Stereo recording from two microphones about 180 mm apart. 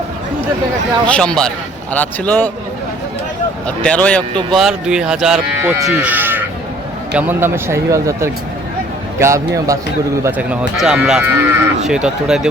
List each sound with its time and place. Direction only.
1.0 s a man's voice: 5° left (ahead or behind)
3.8 s a man's voice: 5° left (ahead or behind)